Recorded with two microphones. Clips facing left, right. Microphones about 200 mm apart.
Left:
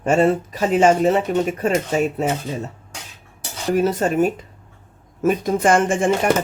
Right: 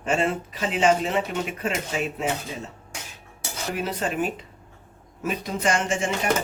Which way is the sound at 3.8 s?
45° left (ahead or behind).